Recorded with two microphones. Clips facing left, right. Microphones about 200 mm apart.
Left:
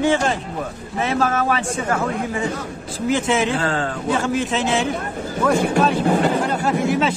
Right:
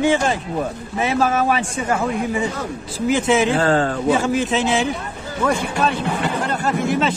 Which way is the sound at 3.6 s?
40° right (ahead or behind).